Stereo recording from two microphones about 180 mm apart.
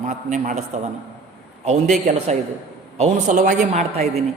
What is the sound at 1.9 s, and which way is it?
A woman's voice, 40° right (ahead or behind).